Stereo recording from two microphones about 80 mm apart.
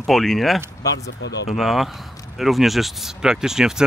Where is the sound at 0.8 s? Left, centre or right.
Left.